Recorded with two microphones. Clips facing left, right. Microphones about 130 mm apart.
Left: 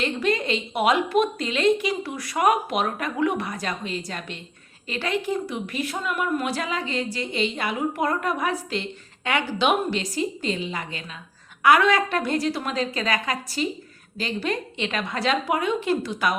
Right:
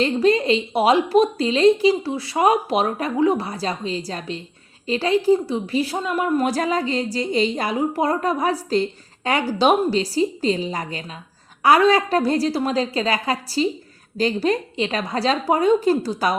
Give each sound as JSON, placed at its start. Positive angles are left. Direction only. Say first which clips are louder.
{"t": 0.0, "sound": "a woman's voice", "louder": "right 7 dB", "side_deg": -35}